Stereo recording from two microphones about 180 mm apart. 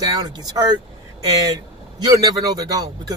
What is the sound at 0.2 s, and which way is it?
A man's voice, 20° right (ahead or behind).